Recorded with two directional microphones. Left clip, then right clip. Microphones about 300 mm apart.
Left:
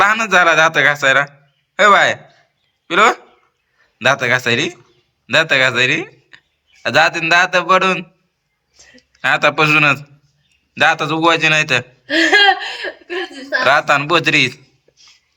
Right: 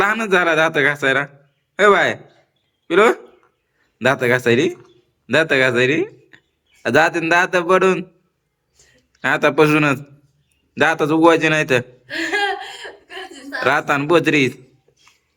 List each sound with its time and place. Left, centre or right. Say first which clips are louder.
0.0 s a man's voice: left 5 dB; centre
9.1 s speech: left 1 dB; centre
12.0 s chuckle: left 9 dB; centre
13.7 s speech: left 3 dB; centre